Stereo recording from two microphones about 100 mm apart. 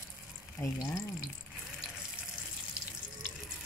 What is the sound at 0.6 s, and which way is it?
Speech, 25° left (ahead or behind).